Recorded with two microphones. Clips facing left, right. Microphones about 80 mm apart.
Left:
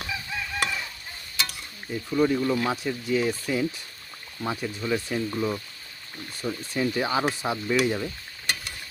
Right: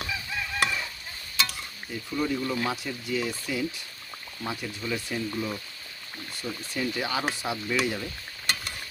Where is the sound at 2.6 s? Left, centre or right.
Left.